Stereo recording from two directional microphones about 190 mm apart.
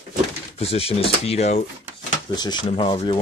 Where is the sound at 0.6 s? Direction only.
30° left (ahead or behind).